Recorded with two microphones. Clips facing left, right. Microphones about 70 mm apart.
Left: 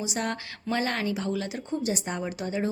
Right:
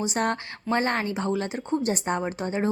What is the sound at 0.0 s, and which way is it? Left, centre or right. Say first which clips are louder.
Speech: right 5 dB; right.